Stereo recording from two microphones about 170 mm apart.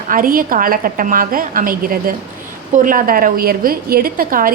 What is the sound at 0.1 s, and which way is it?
A woman's voice, 55° right (ahead or behind).